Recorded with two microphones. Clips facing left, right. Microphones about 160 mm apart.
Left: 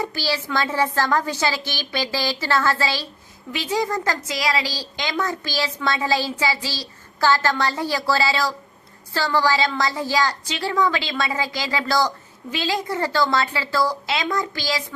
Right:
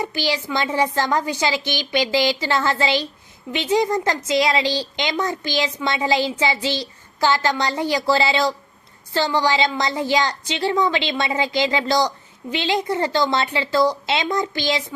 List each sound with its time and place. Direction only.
0.0 s a woman's voice: 15° right (ahead or behind)